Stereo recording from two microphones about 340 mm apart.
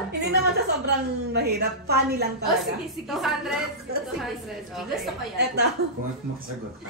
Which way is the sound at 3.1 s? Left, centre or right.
Centre.